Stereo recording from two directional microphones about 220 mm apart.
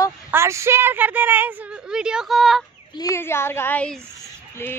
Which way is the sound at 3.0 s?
10° left (ahead or behind).